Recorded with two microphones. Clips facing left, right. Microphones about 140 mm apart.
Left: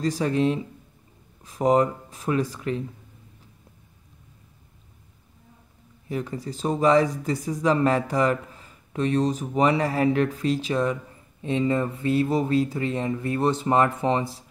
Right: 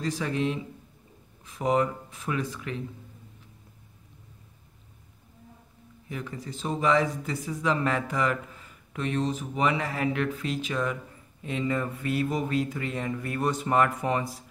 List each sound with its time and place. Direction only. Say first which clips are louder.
0.0 s speech: left 6 dB; 40° left (ahead or behind)
6.0 s speech: left 7 dB; 35° left (ahead or behind)